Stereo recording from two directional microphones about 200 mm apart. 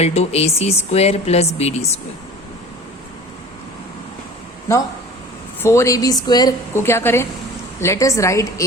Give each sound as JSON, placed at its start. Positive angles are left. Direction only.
{"t": 0.0, "sound": "speech", "side_deg": 30}
{"t": 5.6, "sound": "a woman's voice", "side_deg": 15}